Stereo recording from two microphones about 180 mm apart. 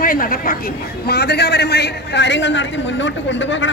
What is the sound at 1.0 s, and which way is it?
A man's voice, 65° left (ahead or behind).